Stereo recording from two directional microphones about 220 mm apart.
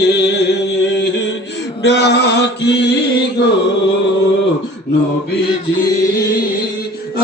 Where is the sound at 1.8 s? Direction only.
50° left (ahead or behind).